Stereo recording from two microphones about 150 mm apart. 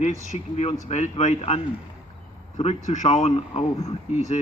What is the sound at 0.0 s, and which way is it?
Speech, 50° left (ahead or behind).